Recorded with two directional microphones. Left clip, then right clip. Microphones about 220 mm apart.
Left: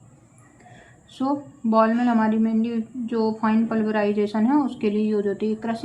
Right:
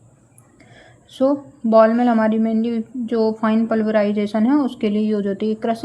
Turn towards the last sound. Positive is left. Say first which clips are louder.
# right 4 dB
turn(degrees=-40)  # may be behind; listen again after turning